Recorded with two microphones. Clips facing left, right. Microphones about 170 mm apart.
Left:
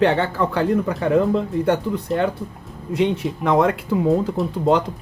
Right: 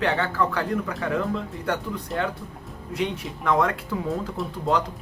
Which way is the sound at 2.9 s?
20° left (ahead or behind).